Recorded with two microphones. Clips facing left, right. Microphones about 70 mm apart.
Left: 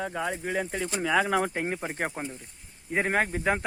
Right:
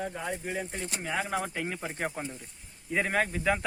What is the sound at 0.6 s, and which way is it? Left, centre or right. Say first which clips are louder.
Speech: left 6 dB; left.